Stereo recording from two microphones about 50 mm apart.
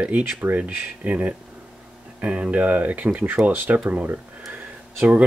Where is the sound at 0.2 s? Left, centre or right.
Right.